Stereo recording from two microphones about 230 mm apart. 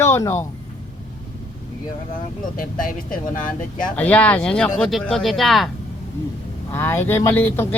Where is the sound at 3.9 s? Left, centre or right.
Centre.